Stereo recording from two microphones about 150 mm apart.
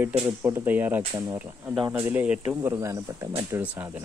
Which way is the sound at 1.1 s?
30° right (ahead or behind).